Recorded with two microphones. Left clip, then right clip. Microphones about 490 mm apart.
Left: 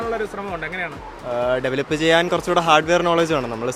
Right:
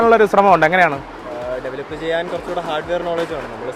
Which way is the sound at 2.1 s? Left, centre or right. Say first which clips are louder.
Left 3 dB; left.